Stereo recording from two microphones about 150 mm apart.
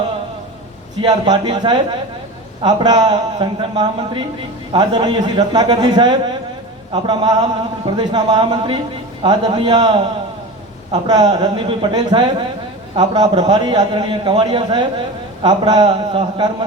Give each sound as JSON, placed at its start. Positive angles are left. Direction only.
{"t": 1.0, "sound": "a man's voice", "side_deg": -30}